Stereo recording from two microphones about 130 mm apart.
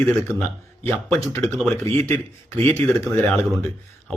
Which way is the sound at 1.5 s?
5° left (ahead or behind).